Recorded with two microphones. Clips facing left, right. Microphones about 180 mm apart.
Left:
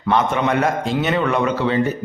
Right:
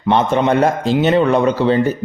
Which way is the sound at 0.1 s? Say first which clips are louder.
Right 4 dB; 30° right (ahead or behind).